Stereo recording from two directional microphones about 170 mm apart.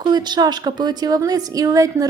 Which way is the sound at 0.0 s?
25° right (ahead or behind).